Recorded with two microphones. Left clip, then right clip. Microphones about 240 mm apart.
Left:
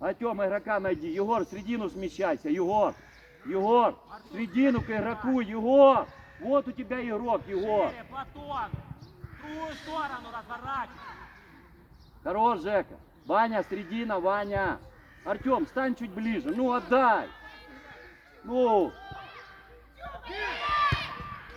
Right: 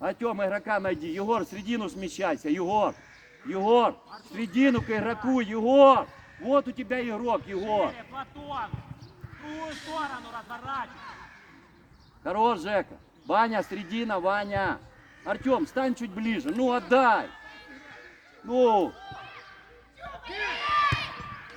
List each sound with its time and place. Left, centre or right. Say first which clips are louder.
0.0 s a man's voice: right 1 dB; right
7.9 s speech: right 1 dB; left
12.2 s a man's voice: right 1 dB; right
17.2 s cat: right 2 dB; centre
18.4 s a man's voice: right 2 dB; right
19.1 s chop: right 1 dB; centre
20.0 s basketball bounce: right 2 dB; centre